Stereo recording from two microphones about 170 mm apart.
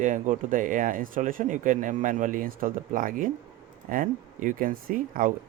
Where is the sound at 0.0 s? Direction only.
50° right (ahead or behind).